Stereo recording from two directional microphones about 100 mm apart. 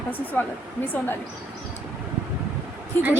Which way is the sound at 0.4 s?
20° left (ahead or behind).